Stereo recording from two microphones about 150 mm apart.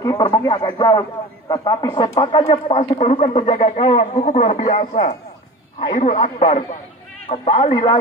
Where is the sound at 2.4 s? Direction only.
40° left (ahead or behind).